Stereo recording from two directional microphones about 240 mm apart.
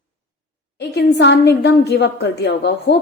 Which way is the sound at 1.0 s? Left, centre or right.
Left.